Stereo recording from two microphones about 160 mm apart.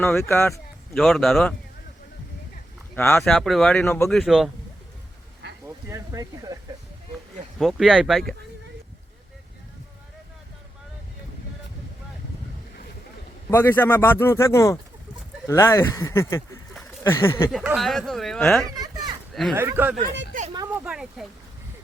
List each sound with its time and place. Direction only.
0.0 s speech: 15° left (ahead or behind)
0.9 s speech: centre (ahead or behind)
2.9 s speech: 15° left (ahead or behind)
4.1 s speech: centre (ahead or behind)
5.6 s speech: 20° right (ahead or behind)
7.6 s speech: centre (ahead or behind)
13.5 s speech: 15° left (ahead or behind)
17.5 s speech: 5° right (ahead or behind)
18.7 s a sound: 25° right (ahead or behind)
19.3 s speech: centre (ahead or behind)
19.5 s speech: 15° right (ahead or behind)
20.0 s speech: 50° right (ahead or behind)
20.7 s speech: 5° right (ahead or behind)